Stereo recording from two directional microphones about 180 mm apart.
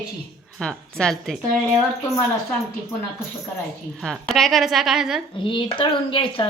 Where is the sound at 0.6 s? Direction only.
5° left (ahead or behind).